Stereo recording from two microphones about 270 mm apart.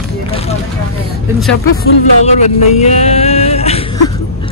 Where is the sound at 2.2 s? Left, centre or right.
Left.